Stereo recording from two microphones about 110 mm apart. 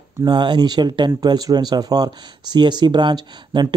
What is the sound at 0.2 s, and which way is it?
Speech, 40° right (ahead or behind).